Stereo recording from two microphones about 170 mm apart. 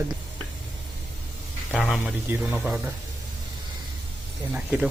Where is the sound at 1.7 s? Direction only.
Centre (ahead or behind).